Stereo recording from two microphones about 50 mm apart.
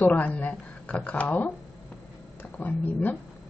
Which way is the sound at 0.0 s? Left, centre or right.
Left.